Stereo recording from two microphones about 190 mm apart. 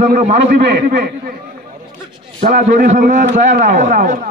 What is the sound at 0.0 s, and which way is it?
Speech, 40° right (ahead or behind).